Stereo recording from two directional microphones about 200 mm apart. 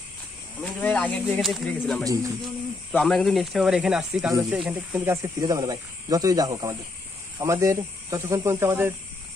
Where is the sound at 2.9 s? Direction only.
Centre (ahead or behind).